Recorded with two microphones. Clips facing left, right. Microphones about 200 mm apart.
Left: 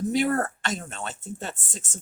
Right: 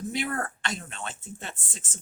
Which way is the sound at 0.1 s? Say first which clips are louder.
Left 8 dB; 45° left (ahead or behind).